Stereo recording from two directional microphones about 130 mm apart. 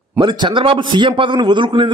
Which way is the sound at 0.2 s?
35° right (ahead or behind).